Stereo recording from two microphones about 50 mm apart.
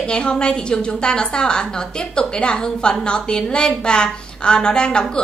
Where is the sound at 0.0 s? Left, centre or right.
Centre.